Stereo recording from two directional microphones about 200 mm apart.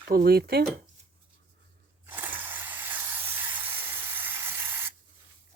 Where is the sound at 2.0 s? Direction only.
10° right (ahead or behind).